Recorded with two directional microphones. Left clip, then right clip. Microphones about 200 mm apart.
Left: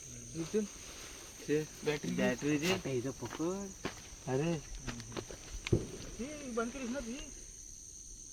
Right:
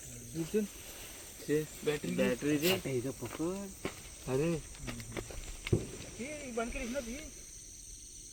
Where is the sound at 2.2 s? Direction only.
35° left (ahead or behind).